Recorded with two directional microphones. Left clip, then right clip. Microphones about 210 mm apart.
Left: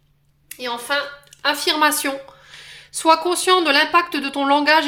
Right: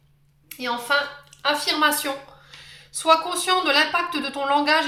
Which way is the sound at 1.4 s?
50° left (ahead or behind).